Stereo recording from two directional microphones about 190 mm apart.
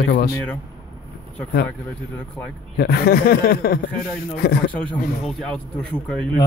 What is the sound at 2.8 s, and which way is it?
Speech, 55° left (ahead or behind).